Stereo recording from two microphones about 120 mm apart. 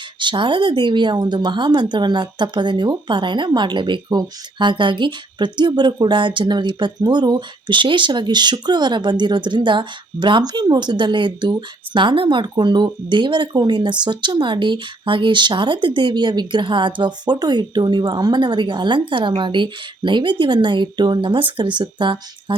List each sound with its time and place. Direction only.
0.2 s a woman's voice: 40° right (ahead or behind)